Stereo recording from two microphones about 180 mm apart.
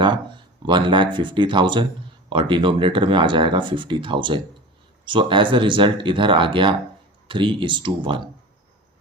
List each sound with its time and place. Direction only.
0.6 s speech: 25° right (ahead or behind)